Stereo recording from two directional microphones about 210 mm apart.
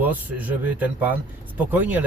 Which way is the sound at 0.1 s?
10° right (ahead or behind).